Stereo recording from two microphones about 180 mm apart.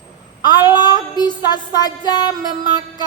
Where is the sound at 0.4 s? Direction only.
25° left (ahead or behind).